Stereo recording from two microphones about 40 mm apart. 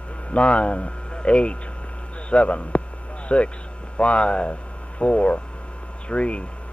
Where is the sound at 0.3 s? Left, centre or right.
Left.